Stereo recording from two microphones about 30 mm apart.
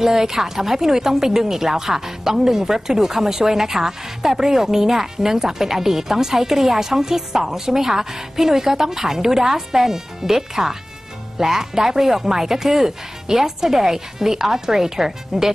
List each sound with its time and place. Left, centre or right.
0.0 s a woman's voice: centre